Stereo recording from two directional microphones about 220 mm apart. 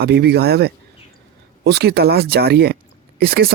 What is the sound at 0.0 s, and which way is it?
Speech, 50° right (ahead or behind).